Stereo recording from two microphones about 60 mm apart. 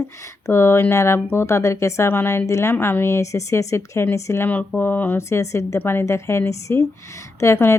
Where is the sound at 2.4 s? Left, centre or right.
Left.